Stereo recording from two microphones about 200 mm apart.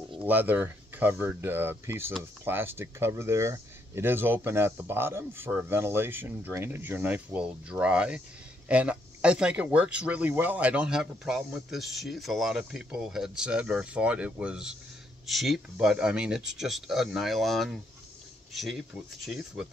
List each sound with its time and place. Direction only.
0.2 s speech: 10° right (ahead or behind)